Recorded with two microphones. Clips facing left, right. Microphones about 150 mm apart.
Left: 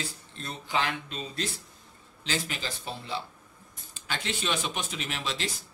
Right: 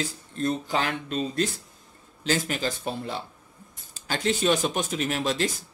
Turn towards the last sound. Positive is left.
turn(degrees=-45)  # may be behind; listen again after turning